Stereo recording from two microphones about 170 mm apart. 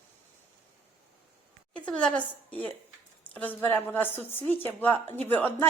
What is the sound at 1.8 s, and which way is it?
A woman's voice, 5° left (ahead or behind).